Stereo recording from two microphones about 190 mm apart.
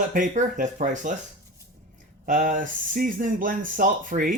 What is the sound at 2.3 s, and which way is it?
Speech, 45° right (ahead or behind).